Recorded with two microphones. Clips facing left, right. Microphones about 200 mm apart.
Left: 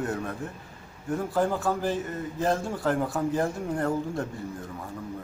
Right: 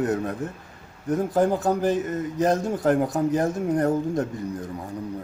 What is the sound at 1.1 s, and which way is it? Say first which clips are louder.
A man's voice: right 5 dB; 20° right (ahead or behind).